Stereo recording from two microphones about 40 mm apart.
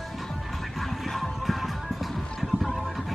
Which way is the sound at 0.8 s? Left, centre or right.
Centre.